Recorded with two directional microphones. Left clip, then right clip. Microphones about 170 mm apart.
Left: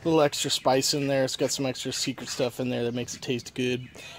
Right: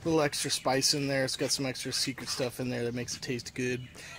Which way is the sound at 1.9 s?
90° left.